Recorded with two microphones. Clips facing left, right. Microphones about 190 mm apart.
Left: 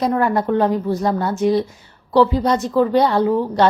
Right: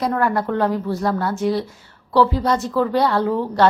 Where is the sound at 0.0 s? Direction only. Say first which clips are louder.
Left 2 dB; 20° left (ahead or behind).